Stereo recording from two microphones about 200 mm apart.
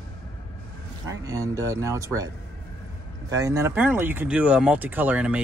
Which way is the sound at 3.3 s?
15° right (ahead or behind).